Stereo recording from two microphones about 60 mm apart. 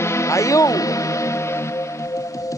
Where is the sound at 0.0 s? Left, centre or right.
Left.